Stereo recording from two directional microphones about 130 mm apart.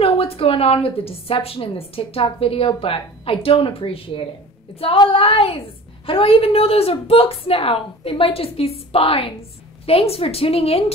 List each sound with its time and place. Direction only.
0.0 s a woman's voice: 50° left (ahead or behind)